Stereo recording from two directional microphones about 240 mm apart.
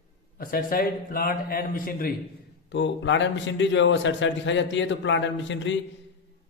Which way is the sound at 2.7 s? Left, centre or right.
Left.